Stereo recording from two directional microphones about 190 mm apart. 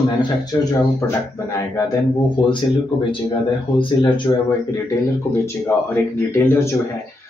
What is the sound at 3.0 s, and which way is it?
Speech, 25° left (ahead or behind).